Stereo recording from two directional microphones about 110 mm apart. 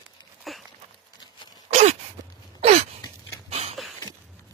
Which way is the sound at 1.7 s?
90° right.